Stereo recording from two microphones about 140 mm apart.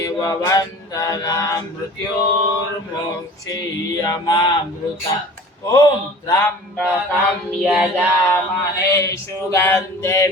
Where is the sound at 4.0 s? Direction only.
25° left (ahead or behind).